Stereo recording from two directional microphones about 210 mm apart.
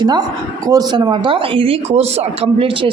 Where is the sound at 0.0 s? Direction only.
20° right (ahead or behind).